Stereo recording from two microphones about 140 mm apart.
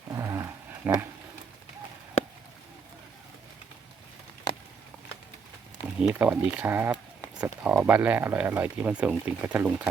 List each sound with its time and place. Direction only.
0.1 s roaring cats: 20° right (ahead or behind)
0.9 s speech: 15° right (ahead or behind)
6.0 s speech: 10° right (ahead or behind)